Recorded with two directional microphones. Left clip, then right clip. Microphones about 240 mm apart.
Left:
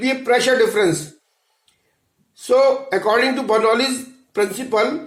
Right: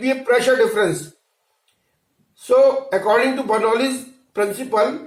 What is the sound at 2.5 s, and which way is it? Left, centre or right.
A man's voice, left.